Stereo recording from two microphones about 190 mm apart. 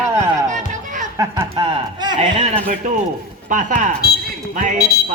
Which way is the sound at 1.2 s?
20° right (ahead or behind).